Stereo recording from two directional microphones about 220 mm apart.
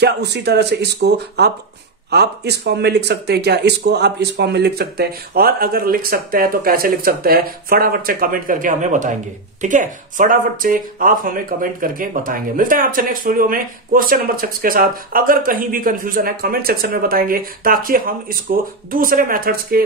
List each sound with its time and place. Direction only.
0.0 s speech: 50° right (ahead or behind)